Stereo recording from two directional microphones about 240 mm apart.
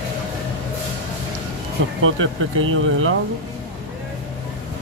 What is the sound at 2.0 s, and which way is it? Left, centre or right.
Speech, right.